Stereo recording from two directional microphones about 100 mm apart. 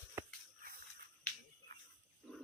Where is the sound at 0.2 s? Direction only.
30° right (ahead or behind).